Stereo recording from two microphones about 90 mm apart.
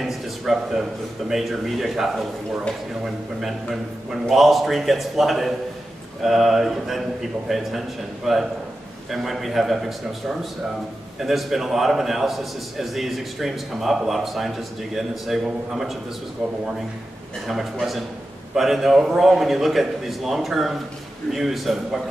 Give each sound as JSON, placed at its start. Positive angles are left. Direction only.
{"t": 0.0, "sound": "a sound", "side_deg": 0}
{"t": 1.3, "sound": "a man's voice", "side_deg": 0}
{"t": 3.3, "sound": "a man's voice", "side_deg": 0}
{"t": 11.1, "sound": "a man's voice", "side_deg": 0}
{"t": 17.5, "sound": "a man's voice", "side_deg": 0}